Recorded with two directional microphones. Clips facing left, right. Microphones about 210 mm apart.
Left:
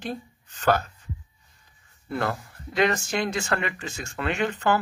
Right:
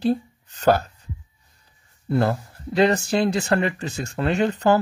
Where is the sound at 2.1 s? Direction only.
35° right (ahead or behind).